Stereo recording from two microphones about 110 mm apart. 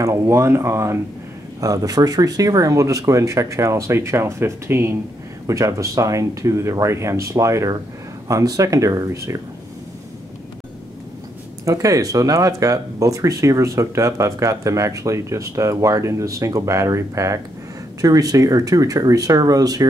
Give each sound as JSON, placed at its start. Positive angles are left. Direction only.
{"t": 0.0, "sound": "speech", "side_deg": -25}
{"t": 11.6, "sound": "speech", "side_deg": -30}